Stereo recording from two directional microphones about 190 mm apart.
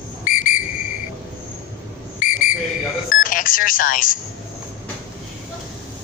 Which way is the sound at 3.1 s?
45° left (ahead or behind).